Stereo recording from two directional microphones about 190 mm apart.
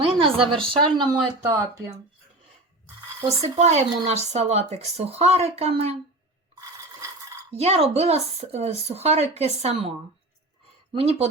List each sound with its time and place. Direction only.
0.0 s speech: 30° right (ahead or behind)
3.2 s speech: 35° right (ahead or behind)
7.5 s speech: 35° right (ahead or behind)
10.9 s speech: 30° right (ahead or behind)